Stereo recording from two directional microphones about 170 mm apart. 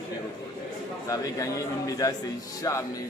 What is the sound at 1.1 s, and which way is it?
A man's voice, 20° left (ahead or behind).